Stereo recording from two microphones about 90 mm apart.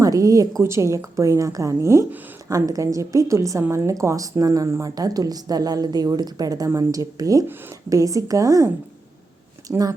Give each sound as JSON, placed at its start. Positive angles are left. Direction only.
{"t": 0.0, "sound": "a woman's voice", "side_deg": -40}